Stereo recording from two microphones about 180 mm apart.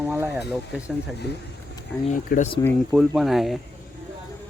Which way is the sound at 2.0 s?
40° left (ahead or behind).